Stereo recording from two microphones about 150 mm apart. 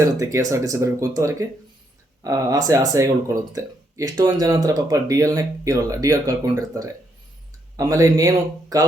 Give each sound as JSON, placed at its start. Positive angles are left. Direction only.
{"t": 0.0, "sound": "speech", "side_deg": -20}